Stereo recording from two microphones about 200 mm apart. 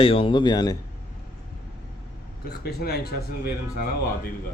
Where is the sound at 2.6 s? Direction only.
50° left (ahead or behind).